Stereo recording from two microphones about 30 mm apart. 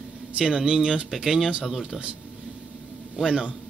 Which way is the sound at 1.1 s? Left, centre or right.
Centre.